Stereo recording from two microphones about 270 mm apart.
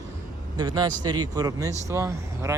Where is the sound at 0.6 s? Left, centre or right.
Centre.